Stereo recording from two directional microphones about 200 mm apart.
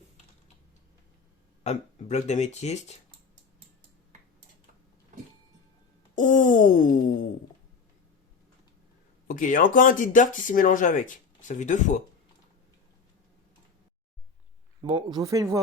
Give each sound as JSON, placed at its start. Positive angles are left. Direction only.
{"t": 1.6, "sound": "speech", "side_deg": 35}
{"t": 6.1, "sound": "speech", "side_deg": 40}
{"t": 9.2, "sound": "speech", "side_deg": 40}
{"t": 14.8, "sound": "speech", "side_deg": -25}